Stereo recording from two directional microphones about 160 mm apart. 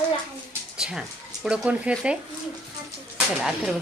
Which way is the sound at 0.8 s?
5° right (ahead or behind).